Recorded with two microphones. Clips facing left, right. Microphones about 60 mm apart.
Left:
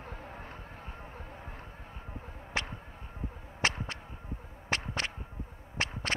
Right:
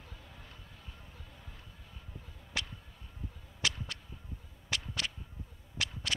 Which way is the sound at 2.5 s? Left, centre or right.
Left.